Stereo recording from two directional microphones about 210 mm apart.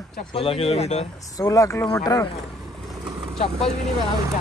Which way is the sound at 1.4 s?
15° left (ahead or behind).